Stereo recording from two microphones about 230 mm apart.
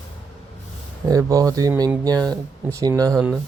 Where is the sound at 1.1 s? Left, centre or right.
Centre.